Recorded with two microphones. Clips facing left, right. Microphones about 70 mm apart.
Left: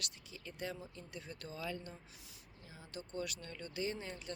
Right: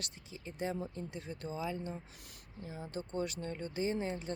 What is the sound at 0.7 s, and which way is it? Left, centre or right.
Speech, right.